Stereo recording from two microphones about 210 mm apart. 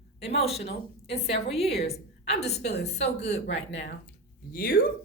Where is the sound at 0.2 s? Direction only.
30° left (ahead or behind).